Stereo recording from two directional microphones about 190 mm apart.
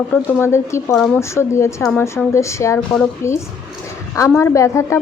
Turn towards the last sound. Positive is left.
turn(degrees=15)  # may be behind; listen again after turning